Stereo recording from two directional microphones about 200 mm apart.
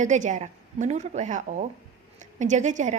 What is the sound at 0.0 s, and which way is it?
A woman's voice, 40° right (ahead or behind).